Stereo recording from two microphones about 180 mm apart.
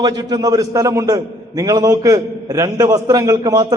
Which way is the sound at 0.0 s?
20° right (ahead or behind).